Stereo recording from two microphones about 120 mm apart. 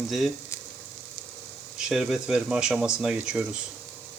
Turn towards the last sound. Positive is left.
turn(degrees=-5)  # may be behind; listen again after turning